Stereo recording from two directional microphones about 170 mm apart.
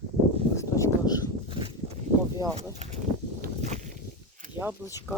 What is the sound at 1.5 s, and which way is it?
Walk, 30° right (ahead or behind).